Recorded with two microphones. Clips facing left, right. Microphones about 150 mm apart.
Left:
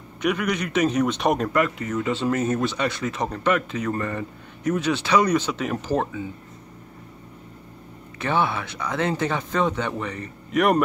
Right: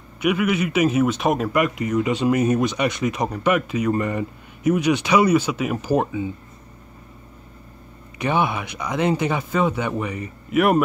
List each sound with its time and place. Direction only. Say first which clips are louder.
0.2 s a man's voice: right 4 dB; 5° right (ahead or behind)
8.2 s speech: right 2 dB; 15° right (ahead or behind)